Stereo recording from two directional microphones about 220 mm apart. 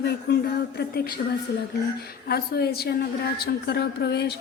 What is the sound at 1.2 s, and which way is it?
Speech, 40° left (ahead or behind).